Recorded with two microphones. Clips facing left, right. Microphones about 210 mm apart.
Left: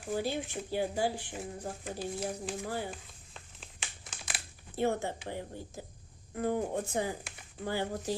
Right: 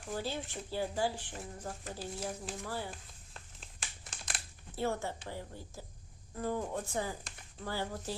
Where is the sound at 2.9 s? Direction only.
Centre (ahead or behind).